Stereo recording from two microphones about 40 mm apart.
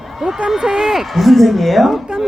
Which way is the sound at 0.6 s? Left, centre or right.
Centre.